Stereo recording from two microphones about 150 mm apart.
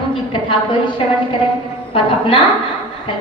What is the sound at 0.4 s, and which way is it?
Music, 35° left (ahead or behind).